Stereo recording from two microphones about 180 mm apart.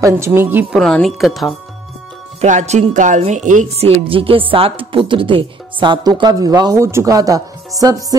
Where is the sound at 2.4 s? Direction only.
40° right (ahead or behind).